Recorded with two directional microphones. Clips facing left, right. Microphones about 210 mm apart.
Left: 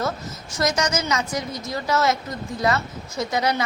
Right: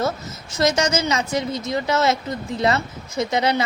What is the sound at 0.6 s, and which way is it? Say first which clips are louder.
Speech: right 3 dB; 25° right (ahead or behind).